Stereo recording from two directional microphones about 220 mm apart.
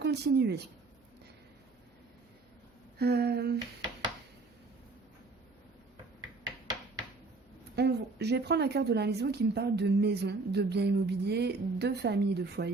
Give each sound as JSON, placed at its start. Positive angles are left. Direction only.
{"t": 0.0, "sound": "a woman's voice", "side_deg": -50}
{"t": 3.0, "sound": "a woman's voice", "side_deg": -50}
{"t": 7.8, "sound": "a woman's voice", "side_deg": -50}